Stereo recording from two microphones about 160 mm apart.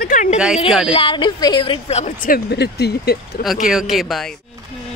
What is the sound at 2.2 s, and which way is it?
Speech, 75° left (ahead or behind).